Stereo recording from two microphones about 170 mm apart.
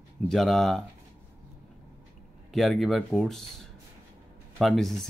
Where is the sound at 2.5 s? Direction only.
Centre (ahead or behind).